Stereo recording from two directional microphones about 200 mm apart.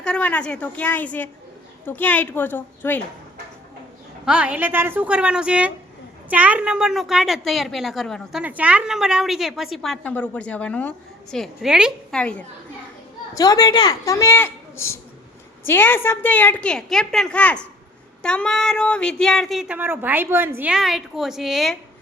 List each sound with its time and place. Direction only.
0.0 s a woman's voice: 5° left (ahead or behind)
4.3 s a woman's voice: 5° right (ahead or behind)
13.3 s a woman's voice: 20° left (ahead or behind); by 21.8 s centre (ahead or behind)